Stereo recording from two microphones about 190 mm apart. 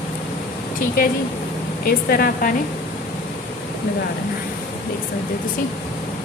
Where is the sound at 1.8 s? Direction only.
50° left (ahead or behind).